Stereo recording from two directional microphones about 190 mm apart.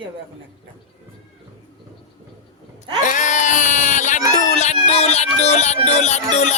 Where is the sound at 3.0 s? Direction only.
40° left (ahead or behind).